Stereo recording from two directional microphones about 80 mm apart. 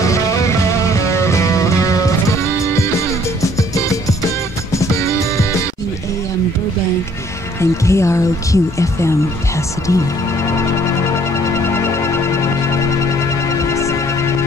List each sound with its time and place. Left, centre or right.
0.0 s music: left
4.7 s music: left
7.8 s speech: left
11.1 s music: left